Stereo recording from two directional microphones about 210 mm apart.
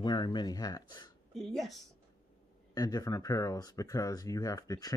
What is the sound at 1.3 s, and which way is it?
Speech, centre (ahead or behind).